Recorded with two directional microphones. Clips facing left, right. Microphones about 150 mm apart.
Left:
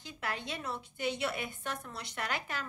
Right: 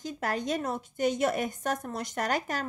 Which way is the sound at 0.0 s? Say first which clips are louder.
Right 8 dB; 40° right (ahead or behind).